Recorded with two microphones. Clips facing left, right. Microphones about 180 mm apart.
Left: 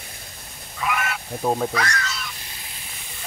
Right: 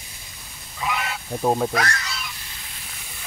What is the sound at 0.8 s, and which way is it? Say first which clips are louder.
Goose: left 1 dB; 15° right (ahead or behind).